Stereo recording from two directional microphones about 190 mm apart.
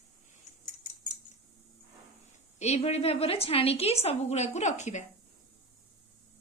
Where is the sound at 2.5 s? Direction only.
35° left (ahead or behind).